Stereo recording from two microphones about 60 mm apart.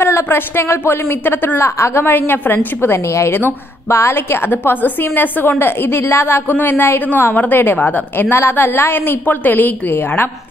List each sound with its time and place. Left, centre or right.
0.0 s a woman's voice: left
1.6 s a woman's voice: left
6.5 s a woman's voice: left